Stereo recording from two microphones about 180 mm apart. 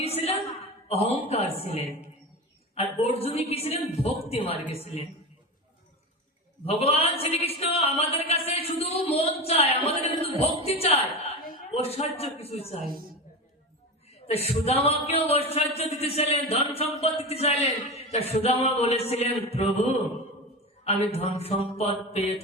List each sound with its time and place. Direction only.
0.0 s a sound: 35° left (ahead or behind)
0.9 s a man's voice: 35° left (ahead or behind)
6.7 s a woman's voice: 35° left (ahead or behind)
14.3 s speech: 35° left (ahead or behind)